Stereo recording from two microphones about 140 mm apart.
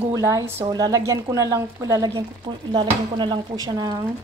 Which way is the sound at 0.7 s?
30° right (ahead or behind).